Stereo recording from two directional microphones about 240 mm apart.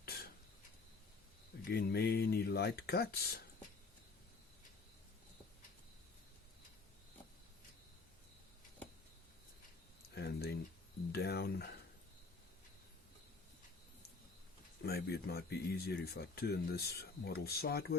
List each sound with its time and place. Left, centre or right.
0.0 s a sound: left
1.7 s speech: left
10.2 s speech: left
14.8 s speech: left